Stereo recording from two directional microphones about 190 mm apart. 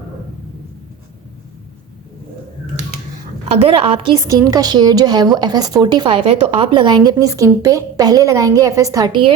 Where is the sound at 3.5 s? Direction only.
30° right (ahead or behind).